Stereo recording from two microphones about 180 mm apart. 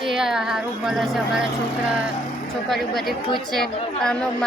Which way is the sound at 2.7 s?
Centre (ahead or behind).